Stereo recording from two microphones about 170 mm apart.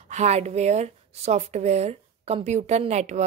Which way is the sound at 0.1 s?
40° right (ahead or behind).